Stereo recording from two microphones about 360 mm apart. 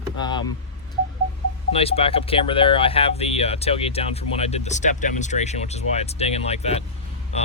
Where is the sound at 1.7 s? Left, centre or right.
Centre.